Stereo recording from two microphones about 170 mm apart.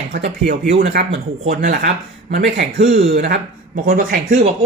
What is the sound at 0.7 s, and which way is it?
Speech, 70° right (ahead or behind).